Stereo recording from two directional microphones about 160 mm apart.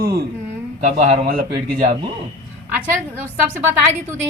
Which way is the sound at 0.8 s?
50° right (ahead or behind).